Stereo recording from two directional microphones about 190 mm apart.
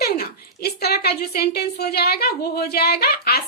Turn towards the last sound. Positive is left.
turn(degrees=55)  # may be behind; listen again after turning